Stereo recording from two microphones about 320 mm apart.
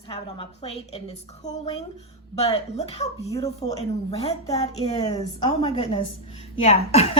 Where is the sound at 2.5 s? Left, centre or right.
Centre.